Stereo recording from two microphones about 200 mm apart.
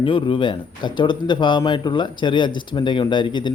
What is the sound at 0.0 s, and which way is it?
Speech, 25° left (ahead or behind).